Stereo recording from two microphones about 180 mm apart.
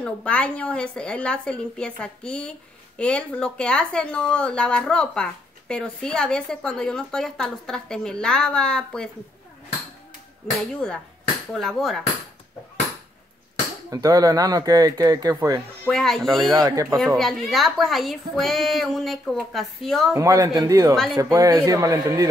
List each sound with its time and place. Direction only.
0.0 s speech: 5° left (ahead or behind)
10.6 s speech: 5° left (ahead or behind)
13.8 s speech: 20° right (ahead or behind)
15.8 s speech: centre (ahead or behind)
16.5 s speech: 20° right (ahead or behind)
17.2 s speech: centre (ahead or behind)
20.2 s speech: 20° right (ahead or behind)